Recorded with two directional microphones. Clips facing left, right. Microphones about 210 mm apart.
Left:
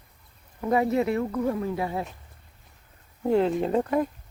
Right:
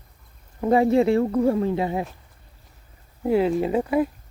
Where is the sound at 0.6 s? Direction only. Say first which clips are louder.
Right 5 dB; 30° right (ahead or behind).